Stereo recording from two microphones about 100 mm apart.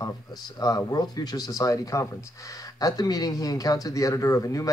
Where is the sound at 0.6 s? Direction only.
35° left (ahead or behind).